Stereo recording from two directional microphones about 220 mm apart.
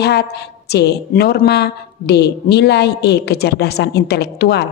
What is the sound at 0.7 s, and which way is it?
A woman's voice, 50° left (ahead or behind).